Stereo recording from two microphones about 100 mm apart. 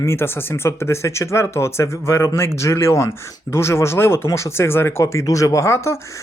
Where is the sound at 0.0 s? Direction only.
25° left (ahead or behind).